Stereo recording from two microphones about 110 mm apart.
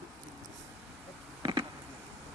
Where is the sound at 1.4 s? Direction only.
45° right (ahead or behind).